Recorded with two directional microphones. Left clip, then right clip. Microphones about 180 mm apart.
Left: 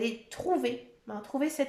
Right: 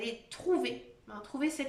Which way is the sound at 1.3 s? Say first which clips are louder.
Left 3 dB; 35° left (ahead or behind).